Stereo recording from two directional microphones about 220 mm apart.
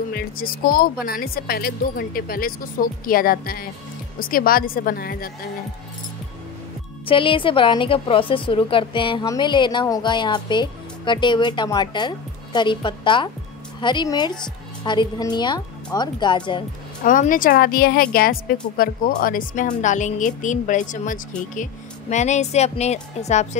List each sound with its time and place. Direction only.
0.1 s speech: 40° left (ahead or behind)
7.1 s a woman's voice: 25° left (ahead or behind)
17.0 s speech: 40° left (ahead or behind)